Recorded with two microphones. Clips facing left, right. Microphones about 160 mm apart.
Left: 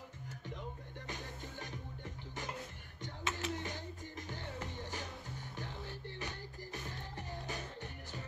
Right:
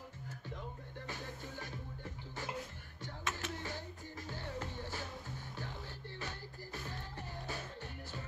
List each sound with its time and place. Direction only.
1.0 s music: 15° left (ahead or behind)
3.0 s a sound: 15° left (ahead or behind)
4.3 s music: 15° left (ahead or behind)
6.1 s music: 15° left (ahead or behind)